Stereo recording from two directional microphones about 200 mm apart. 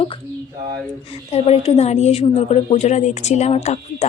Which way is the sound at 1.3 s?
30° left (ahead or behind).